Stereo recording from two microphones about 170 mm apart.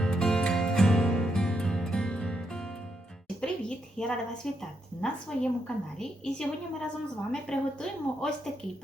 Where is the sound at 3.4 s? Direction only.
5° left (ahead or behind).